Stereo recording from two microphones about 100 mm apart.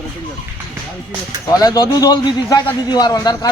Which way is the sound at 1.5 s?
40° left (ahead or behind).